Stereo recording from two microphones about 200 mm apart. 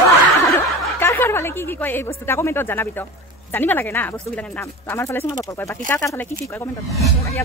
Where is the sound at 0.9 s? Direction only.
10° left (ahead or behind).